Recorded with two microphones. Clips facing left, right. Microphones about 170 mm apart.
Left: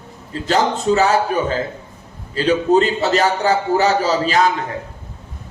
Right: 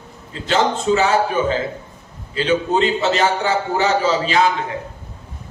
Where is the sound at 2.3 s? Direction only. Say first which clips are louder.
Left 3 dB; 40° left (ahead or behind).